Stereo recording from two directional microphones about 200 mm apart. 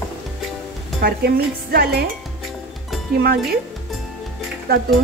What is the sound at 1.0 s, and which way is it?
Speech, 50° right (ahead or behind).